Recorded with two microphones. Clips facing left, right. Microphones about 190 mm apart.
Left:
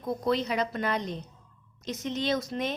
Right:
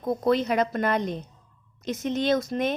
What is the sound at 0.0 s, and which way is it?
A woman's voice, 50° right (ahead or behind).